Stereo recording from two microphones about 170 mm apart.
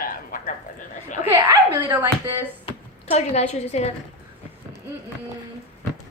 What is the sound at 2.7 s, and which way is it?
Speech, 40° left (ahead or behind).